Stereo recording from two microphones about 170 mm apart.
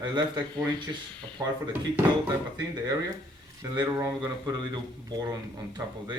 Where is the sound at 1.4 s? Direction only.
20° right (ahead or behind).